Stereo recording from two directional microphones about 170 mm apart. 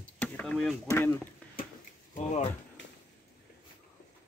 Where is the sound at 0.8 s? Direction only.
15° left (ahead or behind).